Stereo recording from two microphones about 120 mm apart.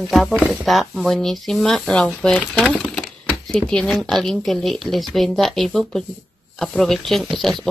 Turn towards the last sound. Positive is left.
turn(degrees=0)  # may be behind; listen again after turning